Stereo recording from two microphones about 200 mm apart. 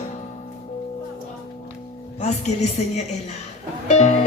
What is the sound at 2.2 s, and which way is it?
Music, 35° left (ahead or behind).